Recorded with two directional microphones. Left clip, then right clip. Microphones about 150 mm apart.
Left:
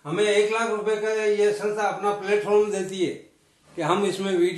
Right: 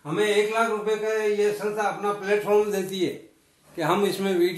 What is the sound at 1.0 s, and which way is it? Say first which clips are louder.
A man's voice: left 3 dB; 10° right (ahead or behind).